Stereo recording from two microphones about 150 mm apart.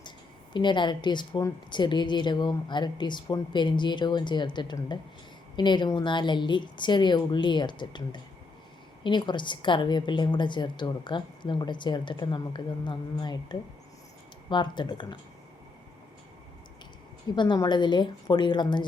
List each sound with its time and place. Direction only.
0.5 s a woman's voice: 30° left (ahead or behind)
1.3 s speech: 20° left (ahead or behind)
1.7 s a woman's voice: 30° left (ahead or behind)
17.3 s a woman's voice: 30° left (ahead or behind)